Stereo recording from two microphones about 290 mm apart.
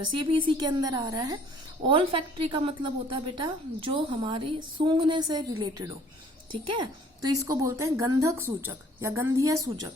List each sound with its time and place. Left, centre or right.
0.2 s a woman's voice: centre